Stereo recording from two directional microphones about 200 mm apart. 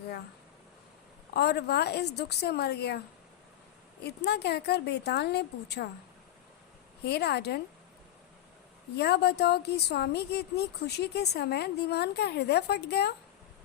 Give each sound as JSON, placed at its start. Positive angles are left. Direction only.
{"t": 1.3, "sound": "a woman's voice", "side_deg": 55}
{"t": 4.0, "sound": "a woman's voice", "side_deg": 55}
{"t": 7.0, "sound": "a woman's voice", "side_deg": 55}
{"t": 9.0, "sound": "a woman's voice", "side_deg": 55}